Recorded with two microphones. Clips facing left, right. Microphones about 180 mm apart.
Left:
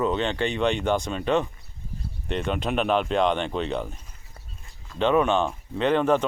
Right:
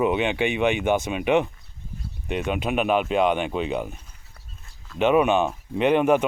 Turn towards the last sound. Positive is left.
turn(degrees=-10)  # may be behind; listen again after turning